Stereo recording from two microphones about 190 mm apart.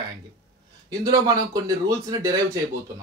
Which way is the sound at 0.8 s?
20° right (ahead or behind).